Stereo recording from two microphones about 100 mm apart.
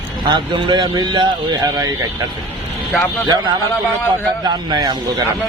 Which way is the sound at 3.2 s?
45° right (ahead or behind).